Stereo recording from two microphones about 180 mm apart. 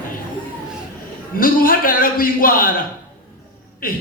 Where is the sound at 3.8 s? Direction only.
50° left (ahead or behind).